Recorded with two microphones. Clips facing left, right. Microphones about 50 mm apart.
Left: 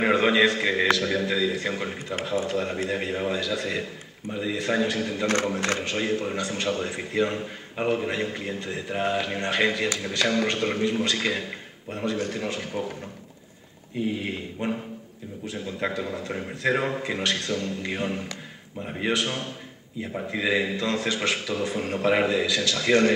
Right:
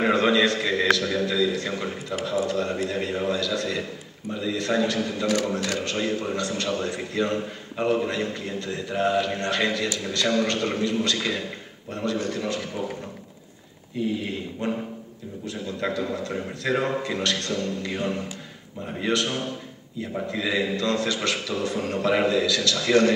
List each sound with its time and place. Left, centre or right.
0.0 s a man's voice: centre
5.2 s speech: left
5.9 s a man's voice: centre
14.6 s a man's voice: centre